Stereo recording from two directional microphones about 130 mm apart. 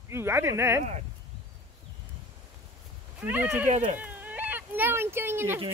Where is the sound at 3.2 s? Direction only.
15° right (ahead or behind).